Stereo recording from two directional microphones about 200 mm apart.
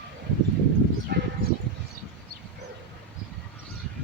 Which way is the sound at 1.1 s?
50° right (ahead or behind).